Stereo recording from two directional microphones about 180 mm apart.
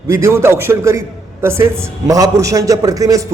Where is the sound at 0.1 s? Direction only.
15° right (ahead or behind).